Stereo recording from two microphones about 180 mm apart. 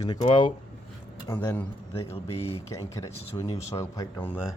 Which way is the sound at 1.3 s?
10° left (ahead or behind).